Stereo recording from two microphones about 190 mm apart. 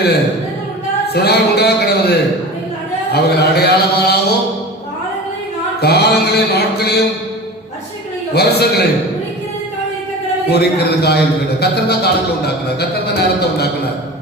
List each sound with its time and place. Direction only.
1.0 s mantra: 60° left (ahead or behind)
5.8 s mantra: 60° left (ahead or behind)
8.3 s mantra: 60° left (ahead or behind)
10.5 s mantra: 60° left (ahead or behind)